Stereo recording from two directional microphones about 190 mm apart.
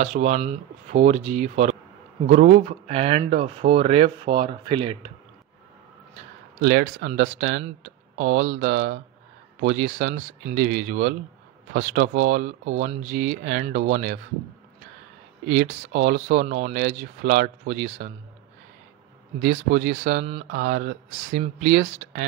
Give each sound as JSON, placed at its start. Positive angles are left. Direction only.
{"t": 0.0, "sound": "speech", "side_deg": -35}
{"t": 6.6, "sound": "speech", "side_deg": -45}
{"t": 15.4, "sound": "speech", "side_deg": -40}
{"t": 19.4, "sound": "speech", "side_deg": -40}
{"t": 20.5, "sound": "speech", "side_deg": -50}